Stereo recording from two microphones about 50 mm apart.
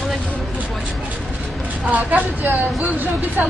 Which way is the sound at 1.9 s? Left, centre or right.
Right.